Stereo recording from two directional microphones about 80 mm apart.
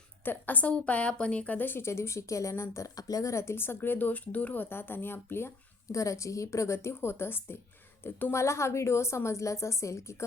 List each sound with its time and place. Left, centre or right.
0.3 s a woman's voice: left